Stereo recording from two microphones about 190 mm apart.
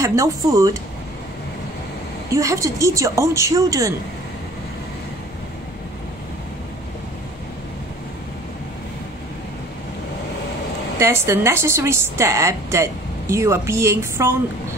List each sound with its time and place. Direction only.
0.0 s a woman's voice: 15° right (ahead or behind)
2.3 s a woman's voice: 15° right (ahead or behind)
11.0 s a woman's voice: 15° right (ahead or behind)